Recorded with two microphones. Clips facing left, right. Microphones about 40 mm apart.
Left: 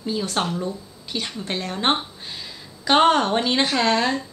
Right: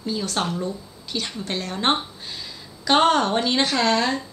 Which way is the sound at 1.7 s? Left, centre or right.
Centre.